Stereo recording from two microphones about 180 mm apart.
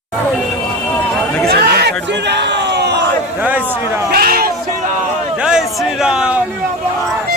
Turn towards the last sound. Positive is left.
turn(degrees=-5)  # may be behind; listen again after turning